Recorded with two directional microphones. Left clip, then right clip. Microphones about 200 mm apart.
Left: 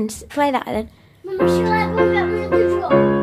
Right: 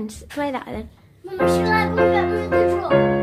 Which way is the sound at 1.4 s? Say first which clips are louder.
Left 1 dB; 5° right (ahead or behind).